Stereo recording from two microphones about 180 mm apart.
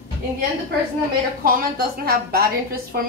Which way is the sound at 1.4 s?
55° right (ahead or behind).